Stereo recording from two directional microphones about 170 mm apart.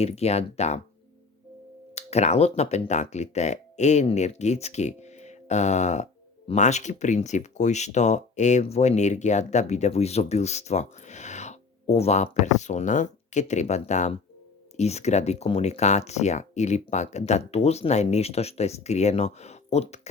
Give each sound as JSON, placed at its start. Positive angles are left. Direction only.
{"t": 0.0, "sound": "speech", "side_deg": 40}
{"t": 2.0, "sound": "speech", "side_deg": 40}